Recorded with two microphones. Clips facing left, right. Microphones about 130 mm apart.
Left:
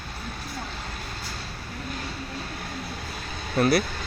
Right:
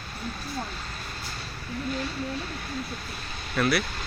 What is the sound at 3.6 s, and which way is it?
Speech, 35° left (ahead or behind).